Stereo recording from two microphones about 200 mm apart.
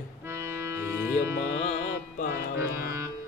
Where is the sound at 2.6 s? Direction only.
15° right (ahead or behind).